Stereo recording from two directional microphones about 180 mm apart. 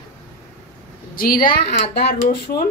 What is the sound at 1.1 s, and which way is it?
Speech, 55° left (ahead or behind).